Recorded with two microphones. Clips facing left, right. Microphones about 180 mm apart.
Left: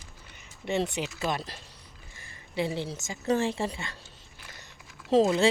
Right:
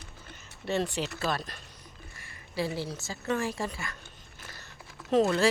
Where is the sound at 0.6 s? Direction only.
15° left (ahead or behind).